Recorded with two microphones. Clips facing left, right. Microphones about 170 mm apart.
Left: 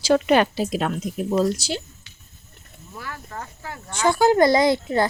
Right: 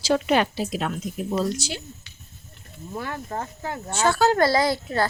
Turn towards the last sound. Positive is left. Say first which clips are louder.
# left 4 dB
turn(degrees=20)  # may be behind; listen again after turning